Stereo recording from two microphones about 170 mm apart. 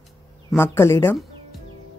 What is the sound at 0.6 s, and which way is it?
Speech, 15° left (ahead or behind).